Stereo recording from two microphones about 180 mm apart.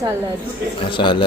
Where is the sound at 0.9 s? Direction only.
25° left (ahead or behind).